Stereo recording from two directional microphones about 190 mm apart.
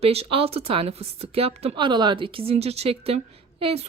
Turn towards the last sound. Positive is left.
turn(degrees=-30)  # may be behind; listen again after turning